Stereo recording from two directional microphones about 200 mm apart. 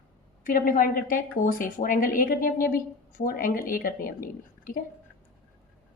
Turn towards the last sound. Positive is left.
turn(degrees=45)  # may be behind; listen again after turning